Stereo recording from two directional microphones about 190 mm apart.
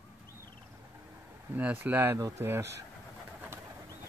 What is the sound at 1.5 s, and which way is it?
Speech, 10° right (ahead or behind).